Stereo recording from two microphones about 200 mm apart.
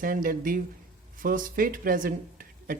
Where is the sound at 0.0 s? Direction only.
45° right (ahead or behind).